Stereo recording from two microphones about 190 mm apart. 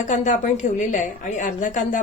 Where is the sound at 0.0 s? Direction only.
40° left (ahead or behind).